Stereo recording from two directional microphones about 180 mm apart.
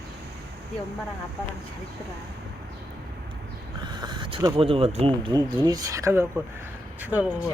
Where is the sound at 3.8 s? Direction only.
25° right (ahead or behind); by 7.3 s 10° right (ahead or behind).